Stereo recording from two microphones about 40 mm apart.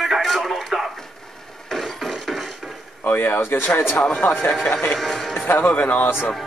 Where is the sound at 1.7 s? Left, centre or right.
Centre.